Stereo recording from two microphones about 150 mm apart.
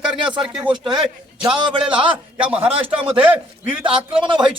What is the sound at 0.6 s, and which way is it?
Speech, 30° right (ahead or behind).